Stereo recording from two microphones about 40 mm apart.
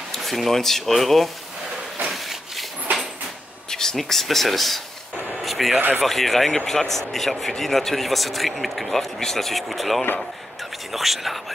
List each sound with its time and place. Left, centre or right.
0.1 s speech: centre
2.0 s a sound: centre
3.7 s a sound: centre
4.0 s speech: centre
5.8 s speech: right
6.0 s speech: centre